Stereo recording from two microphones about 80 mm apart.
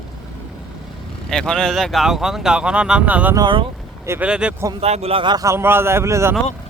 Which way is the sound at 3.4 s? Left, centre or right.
Right.